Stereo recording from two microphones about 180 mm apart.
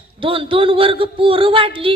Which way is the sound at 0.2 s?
30° right (ahead or behind).